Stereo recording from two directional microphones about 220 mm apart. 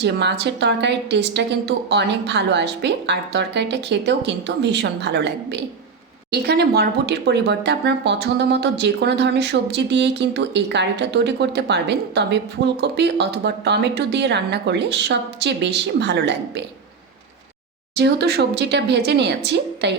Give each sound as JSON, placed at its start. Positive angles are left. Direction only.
{"t": 0.0, "sound": "speech", "side_deg": -50}
{"t": 17.9, "sound": "speech", "side_deg": -50}